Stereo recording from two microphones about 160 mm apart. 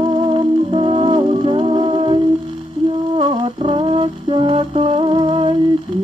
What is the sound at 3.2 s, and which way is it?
Music, 35° right (ahead or behind).